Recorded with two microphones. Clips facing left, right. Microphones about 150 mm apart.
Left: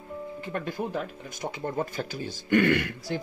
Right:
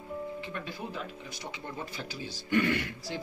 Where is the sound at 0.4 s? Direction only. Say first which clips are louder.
Left 7 dB; 45° left (ahead or behind).